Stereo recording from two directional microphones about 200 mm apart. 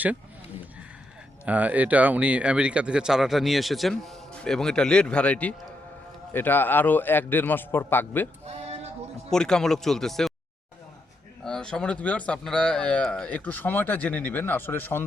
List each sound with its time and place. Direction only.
1.5 s speech: 10° right (ahead or behind); by 8.3 s 10° left (ahead or behind)
8.4 s a sound: 30° right (ahead or behind)
9.3 s speech: 5° left (ahead or behind)
11.4 s speech: 5° left (ahead or behind)